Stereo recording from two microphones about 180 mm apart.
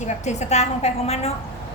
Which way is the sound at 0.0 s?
40° left (ahead or behind).